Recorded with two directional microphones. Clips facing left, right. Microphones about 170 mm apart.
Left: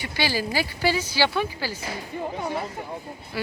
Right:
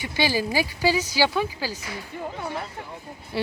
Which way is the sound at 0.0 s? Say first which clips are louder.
Right 2 dB; 20° right (ahead or behind).